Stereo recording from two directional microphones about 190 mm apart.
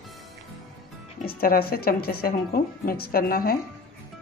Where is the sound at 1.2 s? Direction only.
50° left (ahead or behind).